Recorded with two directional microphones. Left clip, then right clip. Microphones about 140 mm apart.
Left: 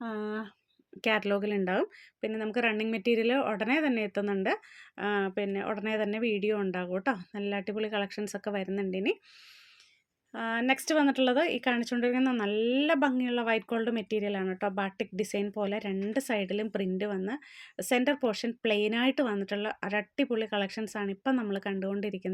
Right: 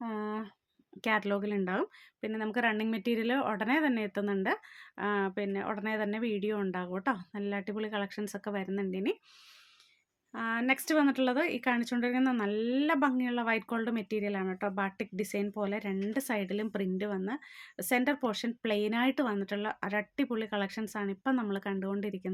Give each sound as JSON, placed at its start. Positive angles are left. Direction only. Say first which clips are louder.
{"t": 0.0, "sound": "a sound", "louder": "left 1 dB", "side_deg": 20}
{"t": 1.0, "sound": "speech", "louder": "left 3 dB", "side_deg": 15}
{"t": 10.3, "sound": "speech", "louder": "left 2 dB", "side_deg": 20}